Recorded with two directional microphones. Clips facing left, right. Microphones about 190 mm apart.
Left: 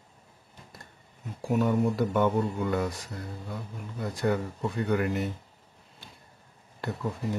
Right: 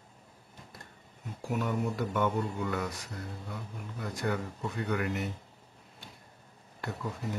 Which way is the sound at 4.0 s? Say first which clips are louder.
Left 5 dB; 30° left (ahead or behind).